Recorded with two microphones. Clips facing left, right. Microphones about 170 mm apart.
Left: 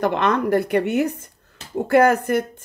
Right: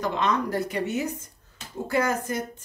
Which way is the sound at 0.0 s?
60° left (ahead or behind).